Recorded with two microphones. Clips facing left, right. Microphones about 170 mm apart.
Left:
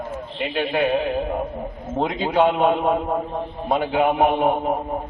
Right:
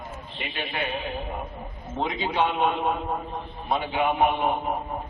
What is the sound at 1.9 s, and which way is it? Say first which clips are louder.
A man's voice: left 6 dB; 50° left (ahead or behind).